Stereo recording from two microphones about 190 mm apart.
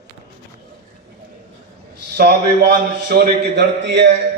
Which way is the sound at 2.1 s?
60° right (ahead or behind).